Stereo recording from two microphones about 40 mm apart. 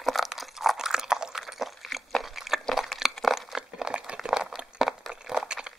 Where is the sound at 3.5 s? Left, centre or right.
Centre.